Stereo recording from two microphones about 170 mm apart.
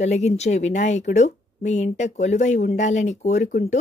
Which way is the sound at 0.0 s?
40° left (ahead or behind).